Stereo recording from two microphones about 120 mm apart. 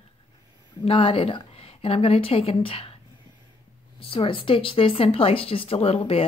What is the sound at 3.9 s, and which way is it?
Speech, 50° left (ahead or behind).